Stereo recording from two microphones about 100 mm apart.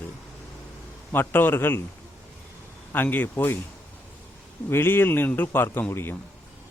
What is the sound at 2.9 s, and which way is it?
Speech, 20° left (ahead or behind).